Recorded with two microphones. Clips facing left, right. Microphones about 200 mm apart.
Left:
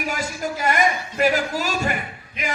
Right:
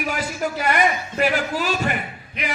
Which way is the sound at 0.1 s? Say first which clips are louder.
Right 2 dB; 45° left (ahead or behind).